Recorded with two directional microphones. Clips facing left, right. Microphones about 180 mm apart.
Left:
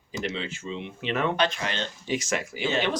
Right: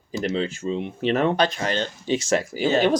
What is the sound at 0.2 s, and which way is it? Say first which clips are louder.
Speech: right 7 dB; 40° right (ahead or behind).